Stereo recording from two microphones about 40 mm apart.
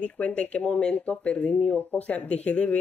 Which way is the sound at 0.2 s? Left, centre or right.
Left.